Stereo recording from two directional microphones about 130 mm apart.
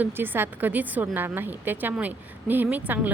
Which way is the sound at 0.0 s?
15° right (ahead or behind).